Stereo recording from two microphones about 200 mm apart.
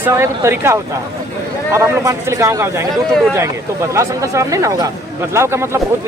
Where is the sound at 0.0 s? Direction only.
15° right (ahead or behind).